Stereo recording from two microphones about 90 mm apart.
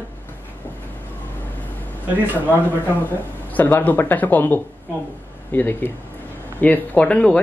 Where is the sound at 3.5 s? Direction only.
20° left (ahead or behind).